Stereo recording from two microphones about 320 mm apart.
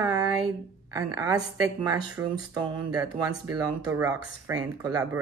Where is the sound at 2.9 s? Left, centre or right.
Centre.